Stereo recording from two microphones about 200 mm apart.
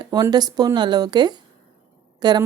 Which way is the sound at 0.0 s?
20° right (ahead or behind).